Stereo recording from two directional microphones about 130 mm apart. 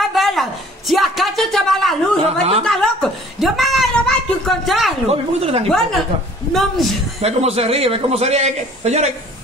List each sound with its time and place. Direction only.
0.0 s a sound: centre (ahead or behind)
5.1 s a man's voice: 50° right (ahead or behind)
5.7 s a woman's voice: centre (ahead or behind)
7.2 s a man's voice: 55° right (ahead or behind)